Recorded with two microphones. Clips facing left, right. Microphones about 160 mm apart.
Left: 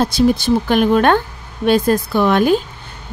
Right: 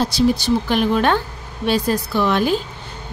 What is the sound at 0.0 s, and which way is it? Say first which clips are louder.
A woman's voice: left 3 dB; 50° left (ahead or behind).